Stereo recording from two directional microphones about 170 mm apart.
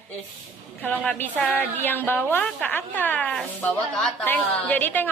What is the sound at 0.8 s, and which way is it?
A woman's voice, 10° left (ahead or behind).